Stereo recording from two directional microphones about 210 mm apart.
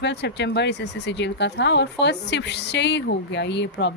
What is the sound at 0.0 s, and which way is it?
Speech, 55° left (ahead or behind).